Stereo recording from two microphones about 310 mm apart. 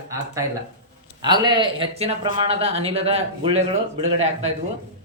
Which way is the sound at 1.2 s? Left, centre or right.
Centre.